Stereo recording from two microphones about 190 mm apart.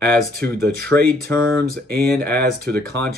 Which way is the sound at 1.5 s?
55° right (ahead or behind).